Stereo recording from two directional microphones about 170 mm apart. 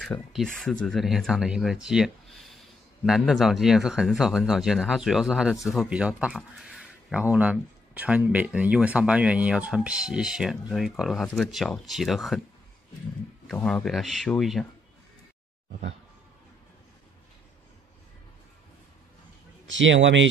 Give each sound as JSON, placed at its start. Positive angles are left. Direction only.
{"t": 0.0, "sound": "speech", "side_deg": 0}
{"t": 13.5, "sound": "speech", "side_deg": 5}
{"t": 19.7, "sound": "speech", "side_deg": -90}